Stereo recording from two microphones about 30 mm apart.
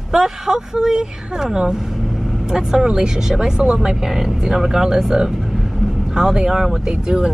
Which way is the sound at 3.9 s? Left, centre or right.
Centre.